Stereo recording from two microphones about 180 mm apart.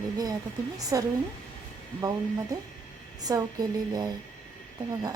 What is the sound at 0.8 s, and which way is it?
A woman's voice, 20° right (ahead or behind).